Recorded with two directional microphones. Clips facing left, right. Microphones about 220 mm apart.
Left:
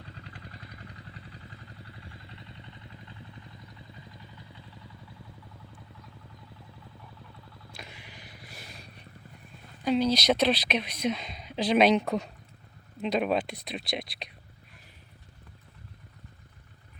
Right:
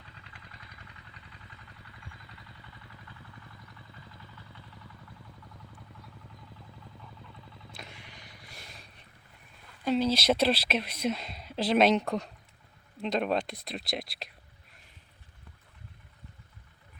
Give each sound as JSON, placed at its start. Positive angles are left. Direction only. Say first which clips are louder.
{"t": 0.0, "sound": "vehicle", "louder": "left 7 dB", "side_deg": 35}
{"t": 7.0, "sound": "vehicle", "louder": "even", "side_deg": 0}
{"t": 9.8, "sound": "speech", "louder": "left 2 dB", "side_deg": 0}